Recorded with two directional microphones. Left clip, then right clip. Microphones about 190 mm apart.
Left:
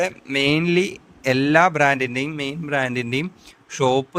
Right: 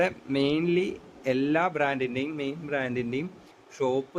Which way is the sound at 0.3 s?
55° left (ahead or behind).